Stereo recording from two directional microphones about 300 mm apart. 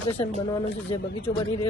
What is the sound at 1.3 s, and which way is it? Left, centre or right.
Speech, centre.